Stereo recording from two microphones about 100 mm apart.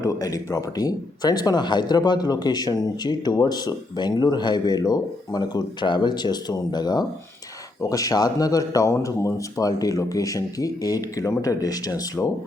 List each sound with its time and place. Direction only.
0.0 s speech: 35° left (ahead or behind)